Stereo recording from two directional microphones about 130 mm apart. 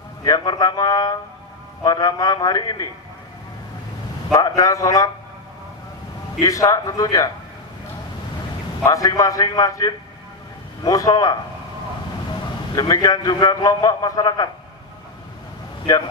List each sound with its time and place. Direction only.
0.2 s a man's voice: 30° left (ahead or behind)
4.3 s a man's voice: 30° left (ahead or behind)
6.4 s a man's voice: 25° left (ahead or behind)
8.8 s a man's voice: 25° left (ahead or behind)
12.7 s a man's voice: 30° left (ahead or behind)